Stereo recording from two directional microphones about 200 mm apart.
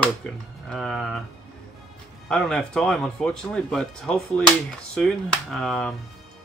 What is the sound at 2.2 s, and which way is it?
Speech, 5° left (ahead or behind).